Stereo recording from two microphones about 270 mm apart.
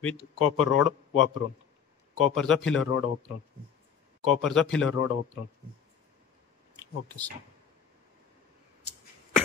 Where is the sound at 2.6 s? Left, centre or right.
Left.